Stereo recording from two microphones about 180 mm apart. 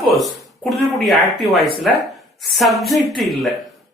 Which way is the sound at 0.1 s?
Centre (ahead or behind).